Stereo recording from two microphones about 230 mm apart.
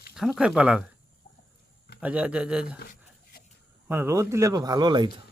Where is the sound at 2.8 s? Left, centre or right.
Left.